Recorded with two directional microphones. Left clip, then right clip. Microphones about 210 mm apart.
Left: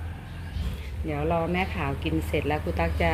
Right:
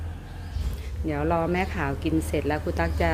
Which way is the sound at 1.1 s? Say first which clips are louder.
Right 2 dB; 20° right (ahead or behind).